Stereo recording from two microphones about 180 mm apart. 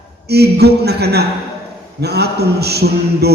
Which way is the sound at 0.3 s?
65° right (ahead or behind).